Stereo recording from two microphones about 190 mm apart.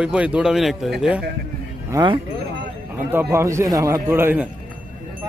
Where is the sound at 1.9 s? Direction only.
15° right (ahead or behind).